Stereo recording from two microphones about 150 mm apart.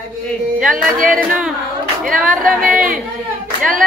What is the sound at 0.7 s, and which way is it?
Music, 65° right (ahead or behind).